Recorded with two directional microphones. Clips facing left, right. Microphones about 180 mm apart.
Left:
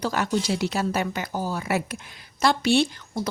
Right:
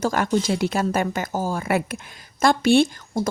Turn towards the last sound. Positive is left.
turn(degrees=-50)  # may be behind; listen again after turning